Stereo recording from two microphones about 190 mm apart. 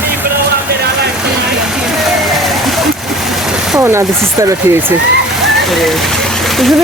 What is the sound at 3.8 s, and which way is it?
Speech, 15° right (ahead or behind).